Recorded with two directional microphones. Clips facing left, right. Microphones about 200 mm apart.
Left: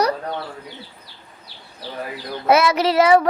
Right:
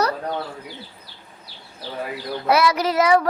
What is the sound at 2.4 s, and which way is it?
Child singing, 25° left (ahead or behind).